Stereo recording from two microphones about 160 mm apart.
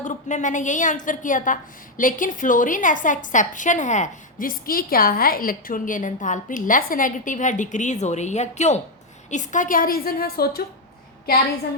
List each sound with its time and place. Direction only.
0.0 s a woman's voice: 50° left (ahead or behind); by 10.6 s 70° left (ahead or behind)